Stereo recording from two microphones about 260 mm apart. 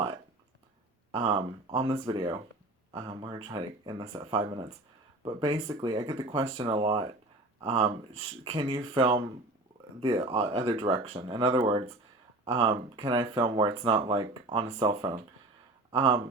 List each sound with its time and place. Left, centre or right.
1.1 s speech: right